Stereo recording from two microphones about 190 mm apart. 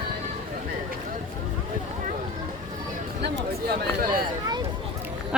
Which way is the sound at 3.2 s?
60° right (ahead or behind).